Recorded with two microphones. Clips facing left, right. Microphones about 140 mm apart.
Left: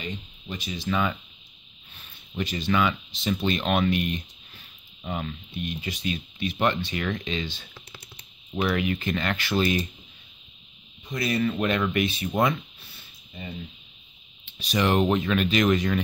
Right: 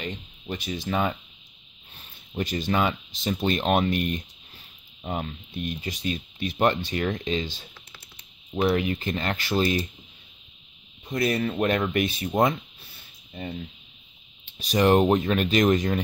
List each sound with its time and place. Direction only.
0.0 s speech: 50° right (ahead or behind)
2.3 s speech: 45° right (ahead or behind)
11.1 s speech: 50° right (ahead or behind)
12.3 s speech: 30° right (ahead or behind)
14.4 s speech: 40° right (ahead or behind)